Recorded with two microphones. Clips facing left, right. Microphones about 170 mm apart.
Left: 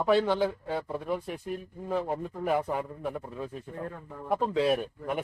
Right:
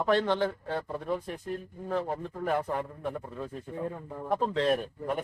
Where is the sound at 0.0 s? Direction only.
10° left (ahead or behind).